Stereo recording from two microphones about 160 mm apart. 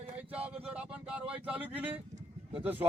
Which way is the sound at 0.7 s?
5° right (ahead or behind).